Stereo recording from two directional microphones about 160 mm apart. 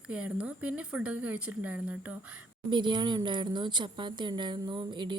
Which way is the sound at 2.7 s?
30° right (ahead or behind).